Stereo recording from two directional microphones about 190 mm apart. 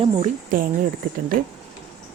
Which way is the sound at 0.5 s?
45° right (ahead or behind).